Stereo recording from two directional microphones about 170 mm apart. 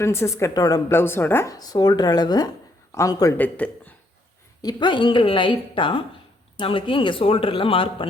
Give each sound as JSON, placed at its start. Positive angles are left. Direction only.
{"t": 0.0, "sound": "a man's voice", "side_deg": 15}
{"t": 3.3, "sound": "speech", "side_deg": 10}
{"t": 4.6, "sound": "a man's voice", "side_deg": 30}